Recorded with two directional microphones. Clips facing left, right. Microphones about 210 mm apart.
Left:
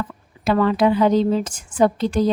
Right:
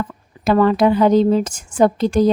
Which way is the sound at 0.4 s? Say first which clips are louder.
Right 3 dB; 45° right (ahead or behind).